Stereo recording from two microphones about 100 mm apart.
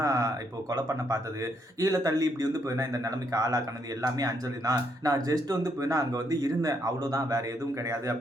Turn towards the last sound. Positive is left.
turn(degrees=-35)  # may be behind; listen again after turning